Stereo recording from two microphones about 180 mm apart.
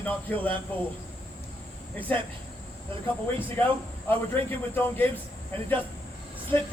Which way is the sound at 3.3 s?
10° left (ahead or behind).